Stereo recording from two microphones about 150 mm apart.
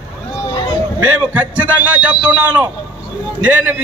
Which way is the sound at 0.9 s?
10° right (ahead or behind).